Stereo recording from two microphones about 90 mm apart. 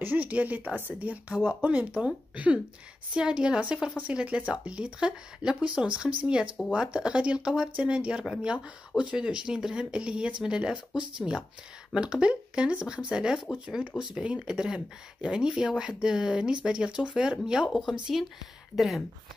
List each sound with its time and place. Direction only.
0.0 s speech: 20° right (ahead or behind)
18.8 s speech: centre (ahead or behind)